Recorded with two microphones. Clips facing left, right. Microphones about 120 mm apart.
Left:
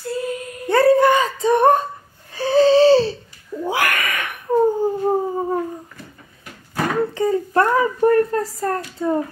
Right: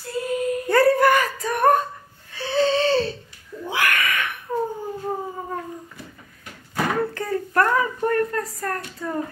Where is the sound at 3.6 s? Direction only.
40° left (ahead or behind).